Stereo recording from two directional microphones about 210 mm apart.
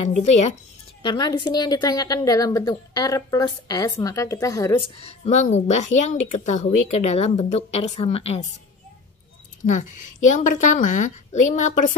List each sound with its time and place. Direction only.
0.2 s speech: 30° left (ahead or behind)
1.0 s a woman's voice: 20° left (ahead or behind)
5.0 s speech: 30° left (ahead or behind)
9.7 s speech: 35° left (ahead or behind)